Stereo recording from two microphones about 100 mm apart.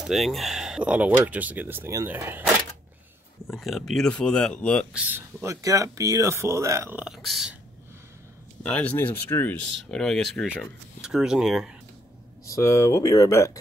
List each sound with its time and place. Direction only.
0.0 s speech: centre (ahead or behind); by 2.4 s 20° right (ahead or behind)
3.4 s speech: centre (ahead or behind)
4.9 s speech: 15° right (ahead or behind)
5.4 s speech: 30° right (ahead or behind)
7.0 s speech: 5° right (ahead or behind)
8.6 s speech: 10° left (ahead or behind)
9.8 s speech: 5° left (ahead or behind)
11.0 s speech: 5° right (ahead or behind)
12.4 s speech: 30° left (ahead or behind)